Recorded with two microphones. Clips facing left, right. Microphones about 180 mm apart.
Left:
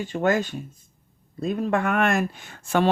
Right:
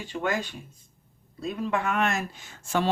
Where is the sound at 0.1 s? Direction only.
45° left (ahead or behind).